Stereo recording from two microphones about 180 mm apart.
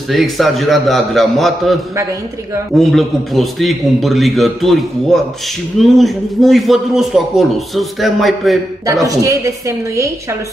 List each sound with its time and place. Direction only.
0.1 s a man's voice: centre (ahead or behind)
2.8 s a man's voice: centre (ahead or behind)
9.0 s speech: 20° right (ahead or behind)